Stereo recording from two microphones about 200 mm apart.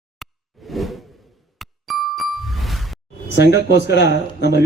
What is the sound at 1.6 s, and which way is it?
Music, centre (ahead or behind).